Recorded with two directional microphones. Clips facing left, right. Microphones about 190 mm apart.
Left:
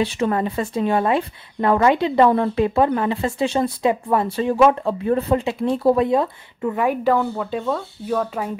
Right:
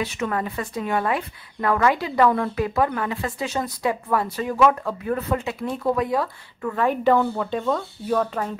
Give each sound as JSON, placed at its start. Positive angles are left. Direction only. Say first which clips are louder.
{"t": 0.0, "sound": "speech", "louder": "left 5 dB", "side_deg": 30}